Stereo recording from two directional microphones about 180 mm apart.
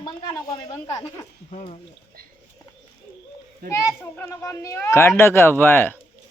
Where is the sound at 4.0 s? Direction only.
15° left (ahead or behind).